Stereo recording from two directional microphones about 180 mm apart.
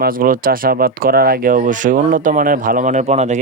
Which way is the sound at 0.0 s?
50° right (ahead or behind).